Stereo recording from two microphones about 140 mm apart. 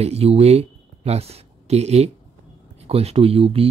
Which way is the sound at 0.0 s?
45° right (ahead or behind).